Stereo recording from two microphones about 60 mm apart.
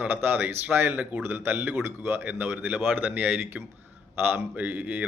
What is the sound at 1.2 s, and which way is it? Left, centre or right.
Speech, right.